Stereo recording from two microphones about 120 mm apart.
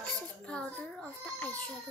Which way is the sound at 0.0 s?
10° left (ahead or behind).